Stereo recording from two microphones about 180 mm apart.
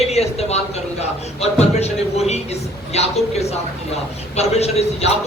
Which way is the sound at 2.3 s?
35° left (ahead or behind).